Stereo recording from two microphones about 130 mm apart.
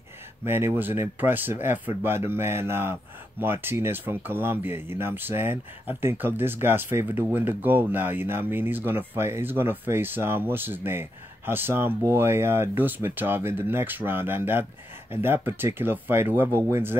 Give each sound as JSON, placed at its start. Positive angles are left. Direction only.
{"t": 0.5, "sound": "speech", "side_deg": -15}